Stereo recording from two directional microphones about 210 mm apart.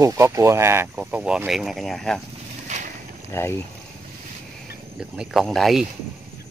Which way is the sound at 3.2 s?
10° left (ahead or behind).